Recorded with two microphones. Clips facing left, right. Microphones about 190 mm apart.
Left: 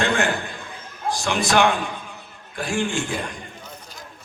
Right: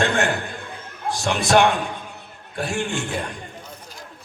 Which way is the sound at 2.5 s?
65° right (ahead or behind).